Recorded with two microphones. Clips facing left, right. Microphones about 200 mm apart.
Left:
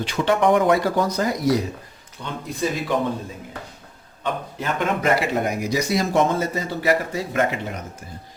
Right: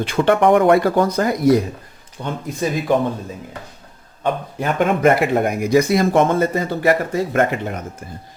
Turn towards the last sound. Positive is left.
turn(degrees=-50)  # may be behind; listen again after turning